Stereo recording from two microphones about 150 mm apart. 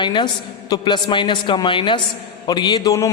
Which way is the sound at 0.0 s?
30° left (ahead or behind).